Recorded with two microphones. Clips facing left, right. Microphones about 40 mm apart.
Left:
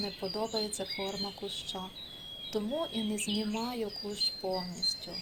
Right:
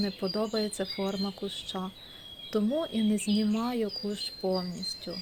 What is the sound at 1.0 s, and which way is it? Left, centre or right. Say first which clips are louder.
Speech: right 6 dB; right.